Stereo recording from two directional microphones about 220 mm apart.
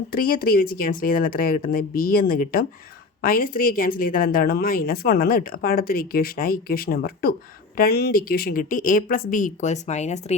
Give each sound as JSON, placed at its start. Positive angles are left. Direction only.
{"t": 0.1, "sound": "a woman's voice", "side_deg": 40}